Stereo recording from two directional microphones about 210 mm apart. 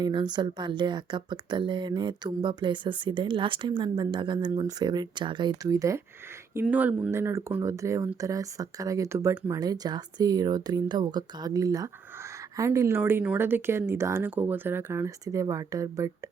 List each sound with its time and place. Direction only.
0.0 s speech: 20° right (ahead or behind)